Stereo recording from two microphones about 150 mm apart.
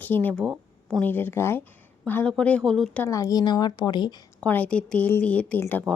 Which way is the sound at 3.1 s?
20° left (ahead or behind).